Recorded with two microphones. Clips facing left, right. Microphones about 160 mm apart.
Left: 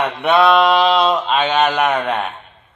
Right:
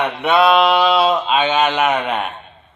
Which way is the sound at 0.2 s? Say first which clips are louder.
Left 1 dB; centre (ahead or behind).